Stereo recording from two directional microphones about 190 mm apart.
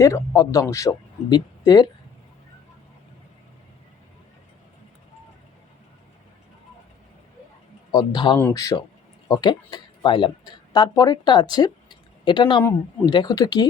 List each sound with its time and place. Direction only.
0.0 s speech: 15° left (ahead or behind)
7.9 s speech: 25° left (ahead or behind)